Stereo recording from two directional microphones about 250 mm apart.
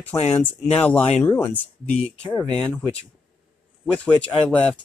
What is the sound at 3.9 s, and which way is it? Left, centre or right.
Speech, centre.